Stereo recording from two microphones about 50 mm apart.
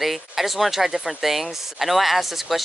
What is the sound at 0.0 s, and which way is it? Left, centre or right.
Speech, centre.